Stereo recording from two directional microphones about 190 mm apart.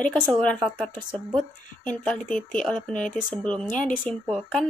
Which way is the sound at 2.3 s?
5° left (ahead or behind).